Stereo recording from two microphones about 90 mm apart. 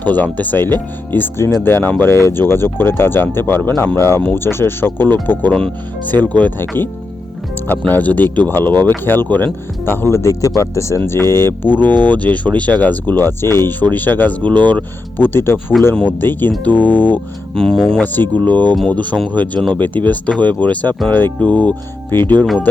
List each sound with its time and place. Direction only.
0.0 s speech: 20° left (ahead or behind)
15.8 s speech: centre (ahead or behind)
16.2 s speech: 20° left (ahead or behind)
17.7 s speech: 5° left (ahead or behind)
18.0 s speech: 20° left (ahead or behind)